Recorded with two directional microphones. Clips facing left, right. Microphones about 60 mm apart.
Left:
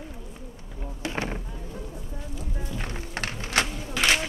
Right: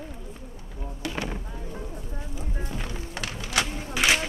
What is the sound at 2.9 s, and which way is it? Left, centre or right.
Music, left.